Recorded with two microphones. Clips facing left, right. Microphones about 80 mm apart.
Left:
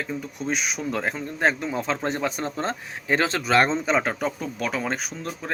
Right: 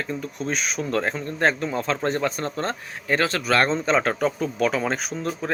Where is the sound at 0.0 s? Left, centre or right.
Centre.